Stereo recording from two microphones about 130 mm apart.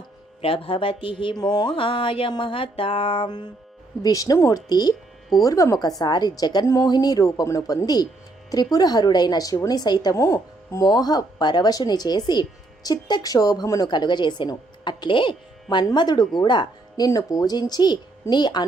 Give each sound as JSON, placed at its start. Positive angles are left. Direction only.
{"t": 0.4, "sound": "a woman's voice", "side_deg": 45}